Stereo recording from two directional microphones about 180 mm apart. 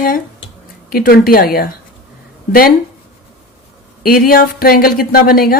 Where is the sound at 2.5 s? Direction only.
55° left (ahead or behind).